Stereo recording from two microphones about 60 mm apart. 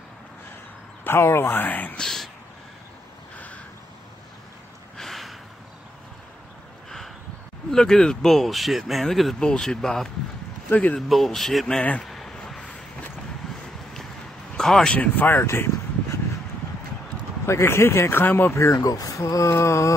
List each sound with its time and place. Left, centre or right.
1.0 s speech: left
1.6 s speech: left
2.0 s speech: centre
3.3 s a sound: left
4.9 s a sound: centre
7.7 s speech: centre
10.7 s speech: left
11.0 s speech: centre
12.0 s a sound: centre
14.6 s speech: centre
15.0 s speech: left
15.4 s speech: left
17.5 s speech: left
18.6 s speech: left